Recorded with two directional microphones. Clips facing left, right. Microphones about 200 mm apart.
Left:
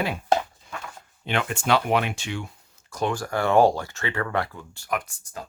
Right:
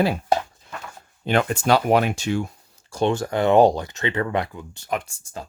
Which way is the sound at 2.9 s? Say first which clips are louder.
Right 5 dB; 30° right (ahead or behind).